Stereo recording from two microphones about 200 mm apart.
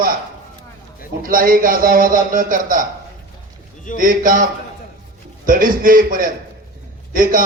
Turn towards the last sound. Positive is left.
turn(degrees=-45)  # may be behind; listen again after turning